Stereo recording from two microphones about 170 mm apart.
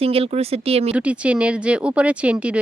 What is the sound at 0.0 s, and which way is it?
Speech, 35° right (ahead or behind).